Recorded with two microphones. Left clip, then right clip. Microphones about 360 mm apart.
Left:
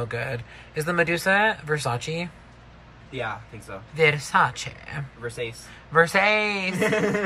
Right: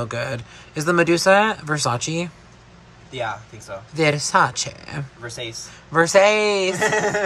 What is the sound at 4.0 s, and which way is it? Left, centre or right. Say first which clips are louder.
Speech: right 2 dB; centre.